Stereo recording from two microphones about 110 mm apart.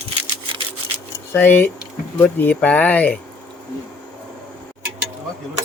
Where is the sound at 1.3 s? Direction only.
20° left (ahead or behind).